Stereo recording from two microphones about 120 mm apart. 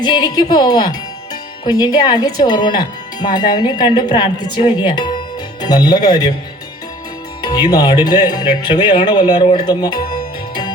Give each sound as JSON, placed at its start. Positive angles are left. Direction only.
{"t": 0.0, "sound": "speech", "side_deg": 35}
{"t": 7.4, "sound": "speech", "side_deg": 35}
{"t": 9.8, "sound": "music", "side_deg": 35}